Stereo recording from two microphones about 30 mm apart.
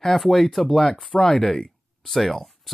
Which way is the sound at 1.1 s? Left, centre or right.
Left.